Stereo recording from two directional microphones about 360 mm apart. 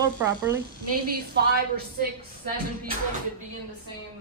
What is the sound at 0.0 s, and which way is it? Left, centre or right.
Speech, centre.